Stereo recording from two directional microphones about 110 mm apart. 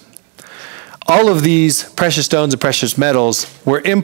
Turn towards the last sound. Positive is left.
turn(degrees=-20)  # may be behind; listen again after turning